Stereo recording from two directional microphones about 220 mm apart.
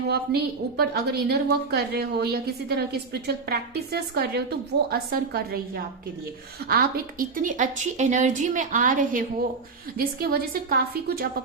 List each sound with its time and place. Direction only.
0.1 s a woman's voice: 45° right (ahead or behind)